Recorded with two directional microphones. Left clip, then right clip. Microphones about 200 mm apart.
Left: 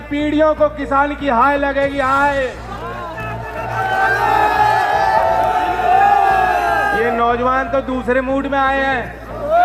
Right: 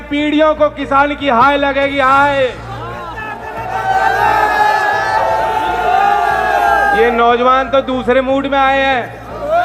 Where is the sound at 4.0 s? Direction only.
40° right (ahead or behind).